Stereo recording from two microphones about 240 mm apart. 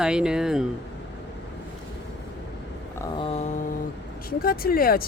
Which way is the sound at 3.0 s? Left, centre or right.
Left.